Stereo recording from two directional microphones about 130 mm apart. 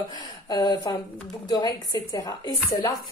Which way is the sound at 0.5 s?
30° left (ahead or behind).